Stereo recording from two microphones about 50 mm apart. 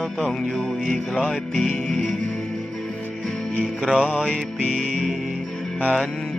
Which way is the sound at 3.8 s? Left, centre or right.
Centre.